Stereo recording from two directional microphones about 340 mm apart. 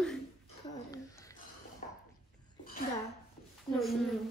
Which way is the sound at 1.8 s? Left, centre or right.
Centre.